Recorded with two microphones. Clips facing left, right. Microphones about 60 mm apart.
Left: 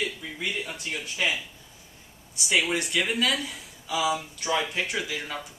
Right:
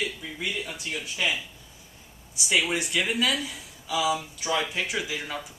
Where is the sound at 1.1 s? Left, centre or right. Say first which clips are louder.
Left 1 dB; centre.